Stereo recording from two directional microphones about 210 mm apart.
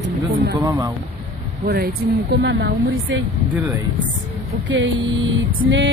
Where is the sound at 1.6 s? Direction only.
45° right (ahead or behind).